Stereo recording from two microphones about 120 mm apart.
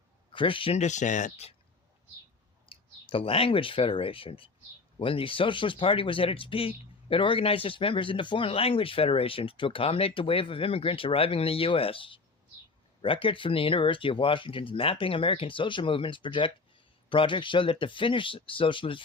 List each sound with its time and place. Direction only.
0.3 s speech: 45° left (ahead or behind)
0.8 s speech: 85° left
2.6 s speech: 45° left (ahead or behind)